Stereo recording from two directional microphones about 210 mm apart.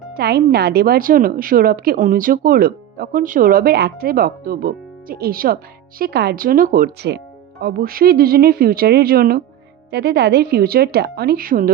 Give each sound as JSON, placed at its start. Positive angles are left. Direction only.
{"t": 0.2, "sound": "a woman's voice", "side_deg": -50}